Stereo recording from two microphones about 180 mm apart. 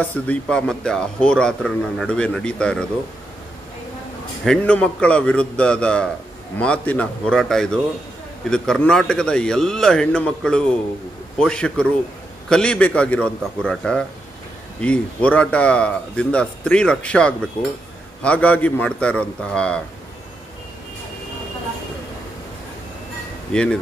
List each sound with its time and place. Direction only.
0.0 s speech: 10° left (ahead or behind)
4.5 s a man's voice: 5° left (ahead or behind)
23.5 s speech: 5° left (ahead or behind)